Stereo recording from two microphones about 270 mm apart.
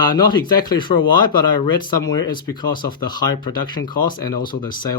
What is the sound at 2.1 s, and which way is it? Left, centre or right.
Speech, centre.